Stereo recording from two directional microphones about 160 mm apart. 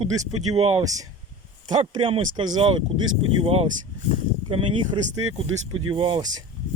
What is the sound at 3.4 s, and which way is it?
Speech, 40° right (ahead or behind).